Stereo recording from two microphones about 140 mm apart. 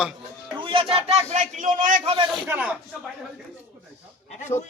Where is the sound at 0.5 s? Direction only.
35° right (ahead or behind).